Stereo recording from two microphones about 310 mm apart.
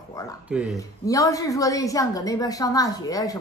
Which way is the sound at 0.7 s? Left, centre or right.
Centre.